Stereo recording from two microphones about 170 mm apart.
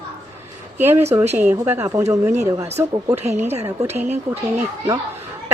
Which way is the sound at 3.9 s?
45° right (ahead or behind).